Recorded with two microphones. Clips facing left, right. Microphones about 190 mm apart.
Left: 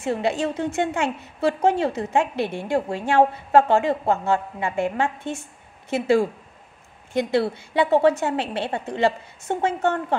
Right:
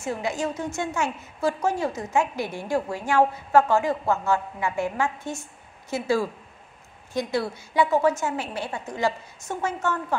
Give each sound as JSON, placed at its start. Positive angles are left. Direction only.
{"t": 0.0, "sound": "a woman's voice", "side_deg": 30}
{"t": 0.7, "sound": "a woman's voice", "side_deg": 60}
{"t": 1.4, "sound": "a woman's voice", "side_deg": 25}